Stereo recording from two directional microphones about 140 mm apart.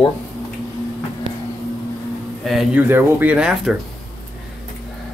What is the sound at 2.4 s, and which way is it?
Speech, centre (ahead or behind).